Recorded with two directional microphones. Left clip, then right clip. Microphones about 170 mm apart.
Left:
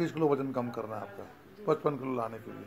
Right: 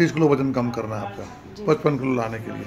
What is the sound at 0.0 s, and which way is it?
Speech, 5° left (ahead or behind).